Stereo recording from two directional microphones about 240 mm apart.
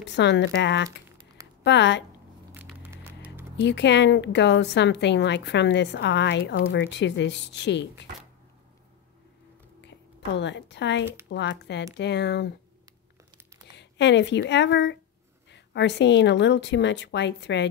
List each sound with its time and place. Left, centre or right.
0.0 s a woman's voice: left
2.5 s a sound: centre
3.6 s a woman's voice: left
9.8 s a sound: left
11.2 s a woman's voice: left
13.7 s a woman's voice: left